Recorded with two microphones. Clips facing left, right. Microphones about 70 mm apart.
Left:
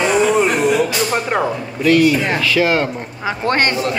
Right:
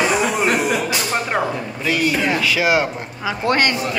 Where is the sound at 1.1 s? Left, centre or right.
Centre.